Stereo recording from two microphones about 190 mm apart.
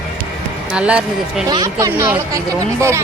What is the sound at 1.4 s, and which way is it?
Speech, 20° right (ahead or behind).